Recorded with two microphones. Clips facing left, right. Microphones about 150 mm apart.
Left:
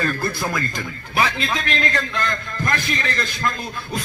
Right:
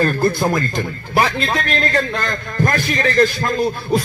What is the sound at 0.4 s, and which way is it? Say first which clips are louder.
A man's voice: right 7 dB; 35° right (ahead or behind).